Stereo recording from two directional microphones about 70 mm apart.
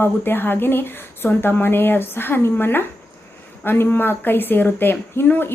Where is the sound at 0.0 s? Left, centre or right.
Left.